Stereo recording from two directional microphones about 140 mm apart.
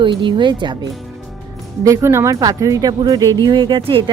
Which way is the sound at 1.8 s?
20° right (ahead or behind).